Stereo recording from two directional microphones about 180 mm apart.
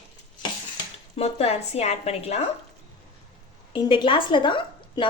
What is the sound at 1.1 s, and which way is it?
A woman's voice, 35° left (ahead or behind).